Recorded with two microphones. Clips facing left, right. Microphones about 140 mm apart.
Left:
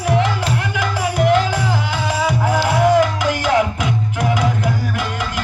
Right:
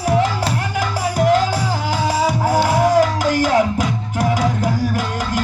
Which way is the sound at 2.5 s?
40° right (ahead or behind).